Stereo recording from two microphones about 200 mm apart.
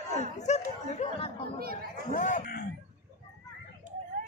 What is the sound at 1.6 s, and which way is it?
Chatter, 50° right (ahead or behind).